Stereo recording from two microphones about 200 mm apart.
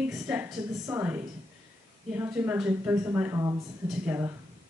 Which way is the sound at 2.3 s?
5° right (ahead or behind).